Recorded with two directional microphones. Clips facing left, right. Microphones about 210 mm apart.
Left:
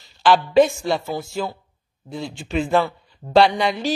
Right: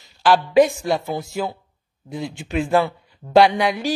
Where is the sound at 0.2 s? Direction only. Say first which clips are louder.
Even; 10° right (ahead or behind).